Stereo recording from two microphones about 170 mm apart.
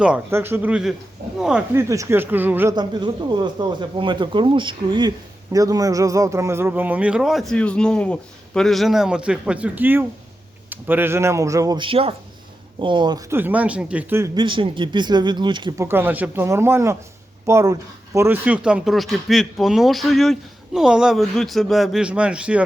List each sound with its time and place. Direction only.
0.0 s speech: 10° right (ahead or behind)
1.7 s speech: 15° right (ahead or behind)
2.7 s speech: 25° right (ahead or behind)
13.3 s speech: 10° right (ahead or behind)
14.3 s speech: 30° right (ahead or behind)
15.8 s speech: 15° right (ahead or behind)